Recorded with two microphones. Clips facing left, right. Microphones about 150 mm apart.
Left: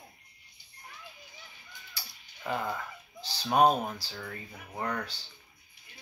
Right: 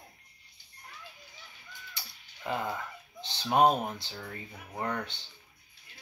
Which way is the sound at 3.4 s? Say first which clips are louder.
Even; 25° right (ahead or behind).